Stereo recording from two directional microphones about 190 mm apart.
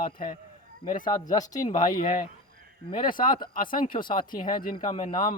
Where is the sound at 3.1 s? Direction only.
45° left (ahead or behind).